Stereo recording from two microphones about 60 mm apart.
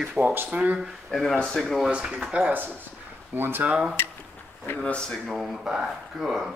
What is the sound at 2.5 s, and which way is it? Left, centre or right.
Speech, right.